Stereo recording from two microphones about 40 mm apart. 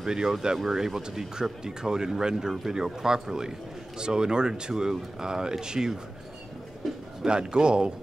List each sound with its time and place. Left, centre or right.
0.0 s speech: centre
7.2 s speech: right